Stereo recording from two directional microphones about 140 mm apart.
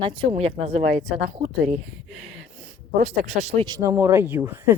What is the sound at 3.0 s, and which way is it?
Speech, 55° right (ahead or behind).